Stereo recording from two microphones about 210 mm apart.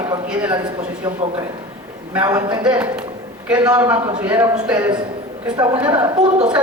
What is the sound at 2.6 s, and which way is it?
A woman's voice, 5° right (ahead or behind).